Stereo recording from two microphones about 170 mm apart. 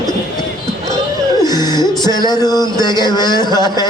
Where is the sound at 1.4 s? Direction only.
25° left (ahead or behind).